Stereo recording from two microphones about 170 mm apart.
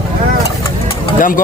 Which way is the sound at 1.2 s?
55° left (ahead or behind).